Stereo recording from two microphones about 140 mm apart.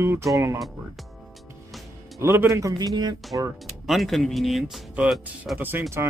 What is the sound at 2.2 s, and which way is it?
Speech, 15° right (ahead or behind).